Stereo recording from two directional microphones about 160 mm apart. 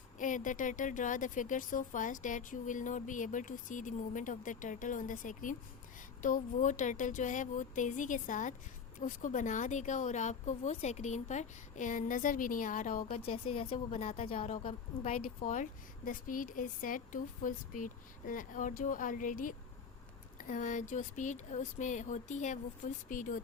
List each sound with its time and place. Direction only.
0.2 s speech: 55° left (ahead or behind)
15.4 s speech: 55° left (ahead or behind)